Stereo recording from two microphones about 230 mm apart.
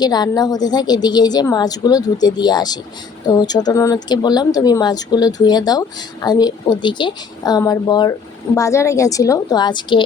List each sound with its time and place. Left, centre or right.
0.0 s a woman's voice: centre